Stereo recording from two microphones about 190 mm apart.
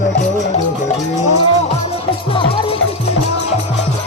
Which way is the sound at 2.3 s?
30° left (ahead or behind).